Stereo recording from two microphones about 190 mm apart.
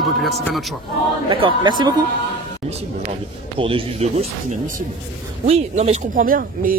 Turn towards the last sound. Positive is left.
turn(degrees=-45)  # may be behind; listen again after turning